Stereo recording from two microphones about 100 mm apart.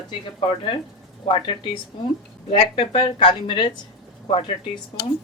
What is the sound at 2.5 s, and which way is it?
Speech, 65° left (ahead or behind).